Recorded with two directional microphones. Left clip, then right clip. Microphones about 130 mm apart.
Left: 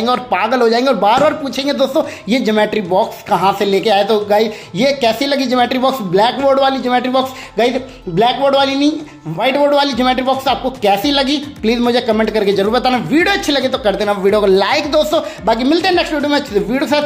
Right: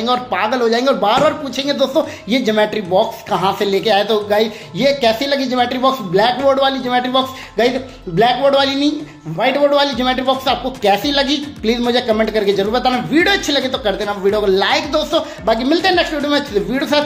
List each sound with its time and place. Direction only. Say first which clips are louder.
0.0 s speech: left 2 dB; 30° left (ahead or behind); by 15.2 s 45° left (ahead or behind)
15.4 s speech: left 1 dB; 30° left (ahead or behind)